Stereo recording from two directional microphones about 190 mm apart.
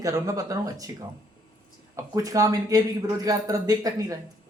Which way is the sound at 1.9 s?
15° right (ahead or behind).